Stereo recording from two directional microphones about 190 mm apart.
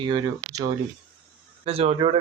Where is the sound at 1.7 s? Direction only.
30° right (ahead or behind).